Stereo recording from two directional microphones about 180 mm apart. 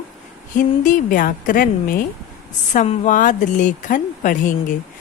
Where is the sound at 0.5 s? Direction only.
45° left (ahead or behind).